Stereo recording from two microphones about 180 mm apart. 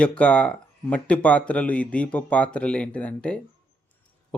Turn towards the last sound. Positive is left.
turn(degrees=5)  # may be behind; listen again after turning